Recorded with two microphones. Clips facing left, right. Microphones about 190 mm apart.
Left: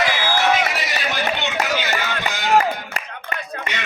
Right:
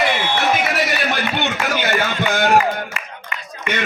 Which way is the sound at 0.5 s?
55° right (ahead or behind).